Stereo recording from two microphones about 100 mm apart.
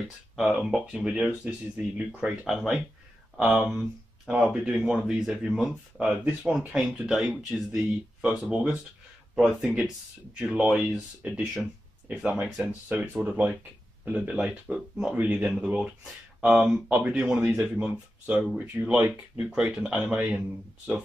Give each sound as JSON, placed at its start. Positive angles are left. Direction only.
{"t": 0.4, "sound": "speech", "side_deg": -5}
{"t": 2.4, "sound": "speech", "side_deg": 0}
{"t": 4.9, "sound": "speech", "side_deg": -5}